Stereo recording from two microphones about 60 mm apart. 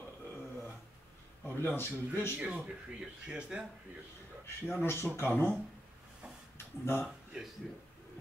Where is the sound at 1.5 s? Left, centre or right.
Left.